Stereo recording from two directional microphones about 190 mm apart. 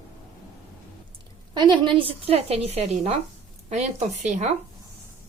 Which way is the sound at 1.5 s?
25° right (ahead or behind).